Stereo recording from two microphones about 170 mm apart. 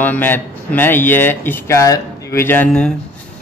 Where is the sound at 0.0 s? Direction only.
10° left (ahead or behind).